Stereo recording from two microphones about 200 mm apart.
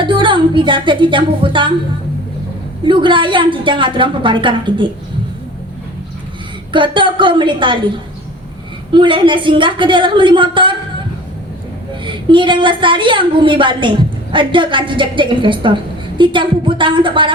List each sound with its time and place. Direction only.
0.0 s speech: 25° right (ahead or behind)
2.8 s a woman's voice: 25° right (ahead or behind)
6.7 s a woman's voice: 25° right (ahead or behind)
8.9 s a woman's voice: 25° right (ahead or behind)
12.0 s a woman's voice: 25° right (ahead or behind)